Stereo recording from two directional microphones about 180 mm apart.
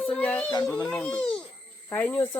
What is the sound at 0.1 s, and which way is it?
Music, 5° left (ahead or behind).